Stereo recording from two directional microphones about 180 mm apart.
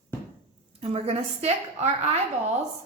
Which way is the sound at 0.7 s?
35° right (ahead or behind).